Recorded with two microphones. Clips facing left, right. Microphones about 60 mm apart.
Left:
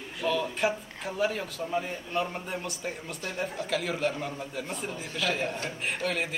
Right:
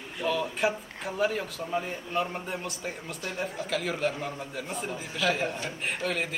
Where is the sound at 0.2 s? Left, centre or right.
Centre.